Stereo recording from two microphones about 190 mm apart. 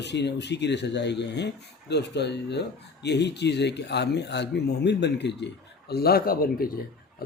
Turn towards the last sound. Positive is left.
turn(degrees=50)  # may be behind; listen again after turning